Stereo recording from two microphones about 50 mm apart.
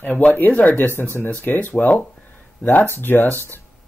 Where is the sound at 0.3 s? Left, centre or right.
Left.